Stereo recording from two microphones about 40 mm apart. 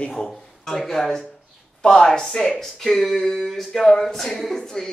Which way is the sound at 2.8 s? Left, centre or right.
Centre.